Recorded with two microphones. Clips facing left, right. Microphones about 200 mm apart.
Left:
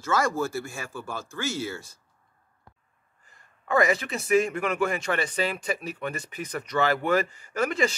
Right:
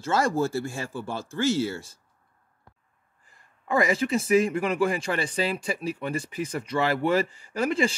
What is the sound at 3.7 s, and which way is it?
A man's voice, 30° right (ahead or behind).